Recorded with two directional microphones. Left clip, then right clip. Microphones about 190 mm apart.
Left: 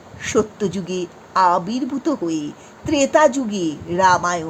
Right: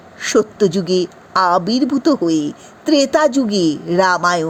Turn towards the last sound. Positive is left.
turn(degrees=-30)  # may be behind; listen again after turning